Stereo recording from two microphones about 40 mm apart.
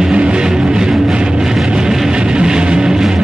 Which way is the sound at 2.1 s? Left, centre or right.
Right.